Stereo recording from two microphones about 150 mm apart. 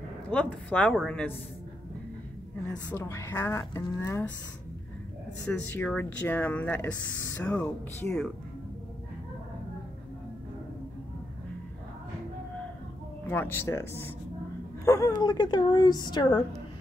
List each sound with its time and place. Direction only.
0.3 s speech: 10° left (ahead or behind)
2.9 s speech: 20° left (ahead or behind)
5.5 s speech: 15° left (ahead or behind)
13.3 s speech: 15° left (ahead or behind)
14.9 s a woman's voice: 25° left (ahead or behind)